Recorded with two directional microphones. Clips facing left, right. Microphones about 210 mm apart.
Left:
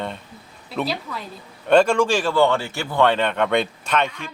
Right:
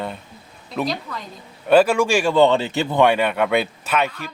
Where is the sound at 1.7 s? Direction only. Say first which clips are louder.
Right 1 dB; 5° right (ahead or behind).